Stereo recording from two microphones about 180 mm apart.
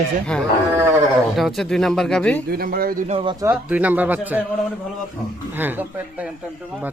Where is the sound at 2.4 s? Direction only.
55° right (ahead or behind).